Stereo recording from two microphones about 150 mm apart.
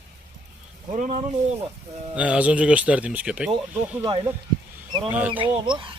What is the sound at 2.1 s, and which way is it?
Speech, 10° right (ahead or behind).